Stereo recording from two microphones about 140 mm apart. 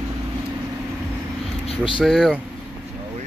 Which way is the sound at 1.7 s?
40° left (ahead or behind).